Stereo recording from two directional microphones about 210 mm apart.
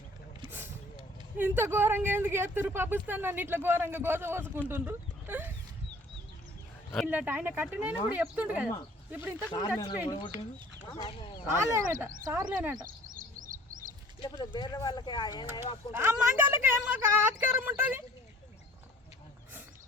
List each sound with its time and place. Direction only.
1.4 s speech: 10° right (ahead or behind)
7.1 s speech: 10° right (ahead or behind)
9.5 s speech: 20° left (ahead or behind)
11.5 s speech: 10° right (ahead or behind)
12.8 s a sound: 40° right (ahead or behind)
14.2 s speech: 20° left (ahead or behind)
15.9 s speech: 10° right (ahead or behind)